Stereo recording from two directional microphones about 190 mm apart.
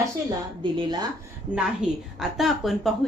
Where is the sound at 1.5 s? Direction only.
5° right (ahead or behind).